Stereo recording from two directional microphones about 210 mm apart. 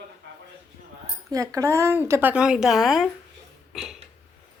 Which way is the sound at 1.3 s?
15° right (ahead or behind).